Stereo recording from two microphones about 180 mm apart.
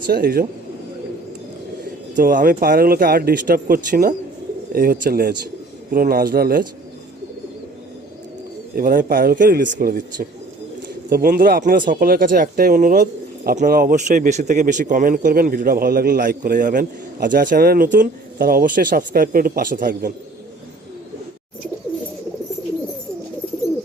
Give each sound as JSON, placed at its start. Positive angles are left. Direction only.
{"t": 0.1, "sound": "speech", "side_deg": -55}
{"t": 2.1, "sound": "speech", "side_deg": -50}
{"t": 8.7, "sound": "speech", "side_deg": -50}